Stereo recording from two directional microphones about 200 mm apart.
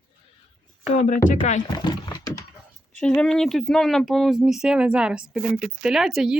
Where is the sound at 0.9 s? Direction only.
35° left (ahead or behind).